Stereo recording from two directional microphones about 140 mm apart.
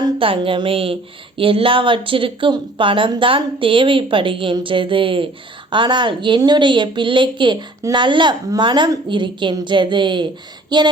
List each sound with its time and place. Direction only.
0.0 s a woman's voice: 40° right (ahead or behind)